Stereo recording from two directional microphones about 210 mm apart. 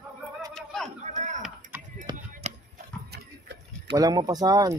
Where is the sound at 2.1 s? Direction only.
30° right (ahead or behind).